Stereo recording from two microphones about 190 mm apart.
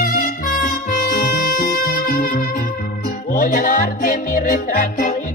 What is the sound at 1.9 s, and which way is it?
Music, 50° left (ahead or behind).